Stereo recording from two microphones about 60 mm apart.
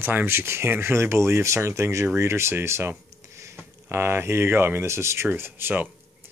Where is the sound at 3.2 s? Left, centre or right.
Right.